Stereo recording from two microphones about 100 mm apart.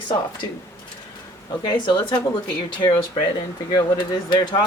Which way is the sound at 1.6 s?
50° left (ahead or behind).